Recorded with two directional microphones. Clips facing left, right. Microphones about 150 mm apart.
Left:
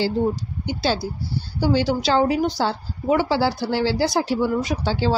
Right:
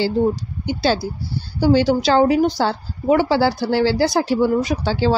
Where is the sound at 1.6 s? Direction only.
55° right (ahead or behind).